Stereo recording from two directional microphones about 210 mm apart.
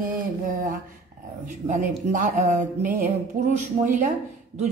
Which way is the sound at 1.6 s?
35° right (ahead or behind).